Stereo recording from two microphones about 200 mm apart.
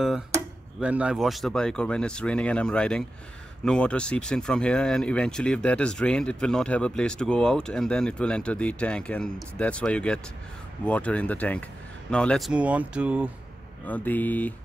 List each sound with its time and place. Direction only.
0.7 s speech: 5° right (ahead or behind)
13.8 s speech: 10° left (ahead or behind)